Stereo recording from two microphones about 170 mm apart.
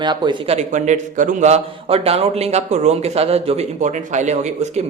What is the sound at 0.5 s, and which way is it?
A man's voice, 45° right (ahead or behind).